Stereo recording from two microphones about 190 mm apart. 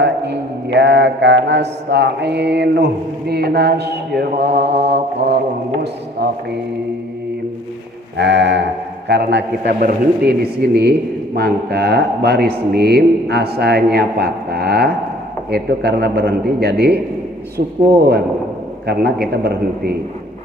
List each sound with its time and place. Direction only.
0.0 s speech: 65° right (ahead or behind)
8.1 s speech: 65° right (ahead or behind)